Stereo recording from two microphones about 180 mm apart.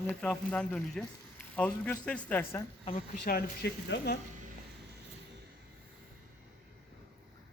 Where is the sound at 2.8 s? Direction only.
30° left (ahead or behind).